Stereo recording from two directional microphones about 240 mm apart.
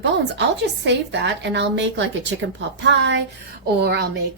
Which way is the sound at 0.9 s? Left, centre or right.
Right.